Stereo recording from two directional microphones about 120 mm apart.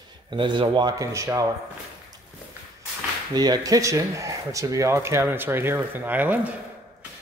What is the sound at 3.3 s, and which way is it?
A man's voice, 35° right (ahead or behind).